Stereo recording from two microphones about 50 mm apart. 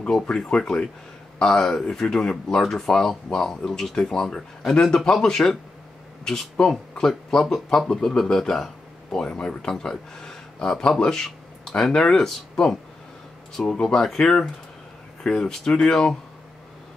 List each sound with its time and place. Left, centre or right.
0.0 s speech: centre
6.7 s speech: centre